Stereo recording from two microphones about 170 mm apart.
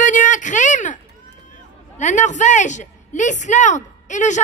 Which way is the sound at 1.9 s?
45° left (ahead or behind).